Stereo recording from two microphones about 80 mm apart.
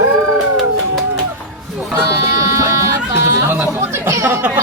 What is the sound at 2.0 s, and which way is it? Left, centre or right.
Music, right.